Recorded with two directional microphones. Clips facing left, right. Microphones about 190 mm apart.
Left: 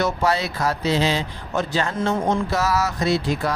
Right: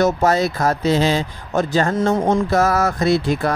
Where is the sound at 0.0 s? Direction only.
45° right (ahead or behind).